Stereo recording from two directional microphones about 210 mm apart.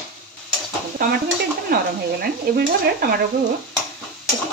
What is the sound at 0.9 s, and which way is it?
Stir, 45° right (ahead or behind).